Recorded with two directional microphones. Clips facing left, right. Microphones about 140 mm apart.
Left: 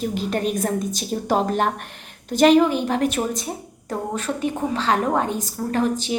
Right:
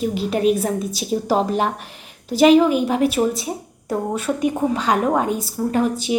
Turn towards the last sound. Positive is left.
turn(degrees=-10)  # may be behind; listen again after turning